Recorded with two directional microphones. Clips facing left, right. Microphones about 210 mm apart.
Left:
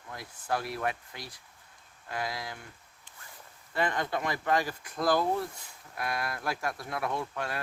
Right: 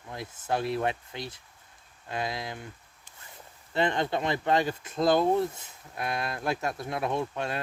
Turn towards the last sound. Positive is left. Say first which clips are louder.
# right 4 dB
turn(degrees=-25)  # may be behind; listen again after turning